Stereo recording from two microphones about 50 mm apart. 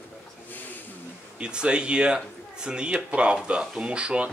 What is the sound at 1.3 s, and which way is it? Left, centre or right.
Speech, centre.